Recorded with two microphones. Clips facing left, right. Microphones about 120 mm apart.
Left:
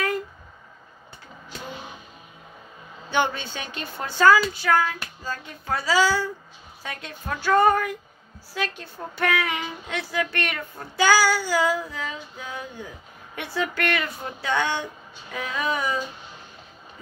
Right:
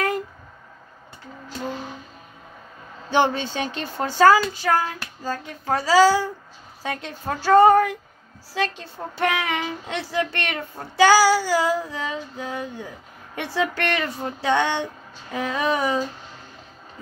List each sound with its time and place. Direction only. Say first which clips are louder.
3.1 s speech: right 4 dB; 35° right (ahead or behind)